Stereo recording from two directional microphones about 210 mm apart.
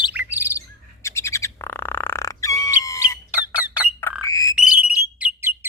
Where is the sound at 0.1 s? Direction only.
10° right (ahead or behind).